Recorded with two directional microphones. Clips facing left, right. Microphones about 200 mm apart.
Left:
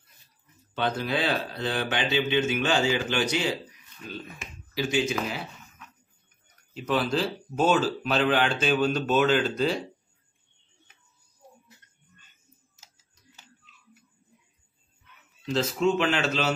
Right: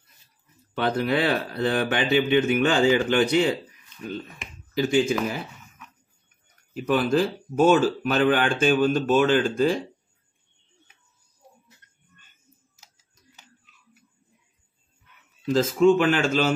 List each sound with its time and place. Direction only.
0.8 s speech: 60° right (ahead or behind)
4.7 s speech: 55° right (ahead or behind)
6.7 s speech: 55° right (ahead or behind)
15.4 s speech: 45° right (ahead or behind)